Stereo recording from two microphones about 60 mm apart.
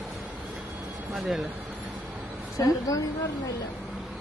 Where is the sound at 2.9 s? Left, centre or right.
Left.